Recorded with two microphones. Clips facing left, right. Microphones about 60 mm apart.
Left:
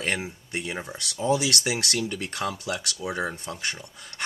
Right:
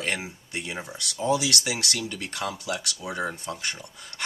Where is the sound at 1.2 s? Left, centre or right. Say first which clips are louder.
Left 1 dB; left.